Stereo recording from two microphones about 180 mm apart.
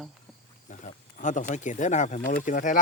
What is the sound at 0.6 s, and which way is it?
Speech, 45° left (ahead or behind).